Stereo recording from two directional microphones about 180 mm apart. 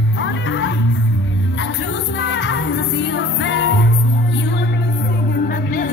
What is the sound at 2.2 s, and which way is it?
Music, 80° left.